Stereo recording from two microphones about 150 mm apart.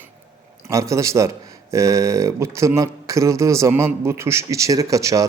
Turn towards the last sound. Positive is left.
turn(degrees=-20)  # may be behind; listen again after turning